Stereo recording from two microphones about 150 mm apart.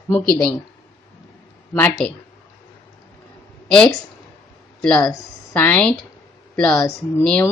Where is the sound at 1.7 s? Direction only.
15° left (ahead or behind).